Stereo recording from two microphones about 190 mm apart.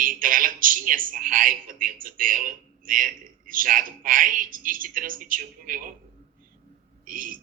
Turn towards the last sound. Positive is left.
turn(degrees=-45)  # may be behind; listen again after turning